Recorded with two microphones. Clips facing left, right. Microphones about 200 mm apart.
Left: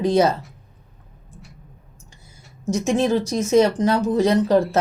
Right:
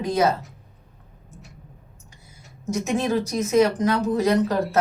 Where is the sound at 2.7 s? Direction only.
30° left (ahead or behind).